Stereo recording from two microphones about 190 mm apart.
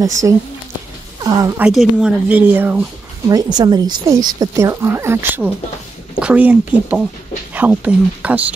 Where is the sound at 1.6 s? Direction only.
5° right (ahead or behind).